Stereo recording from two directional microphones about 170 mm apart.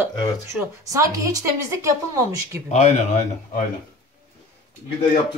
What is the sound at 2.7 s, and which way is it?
Speech, 40° left (ahead or behind).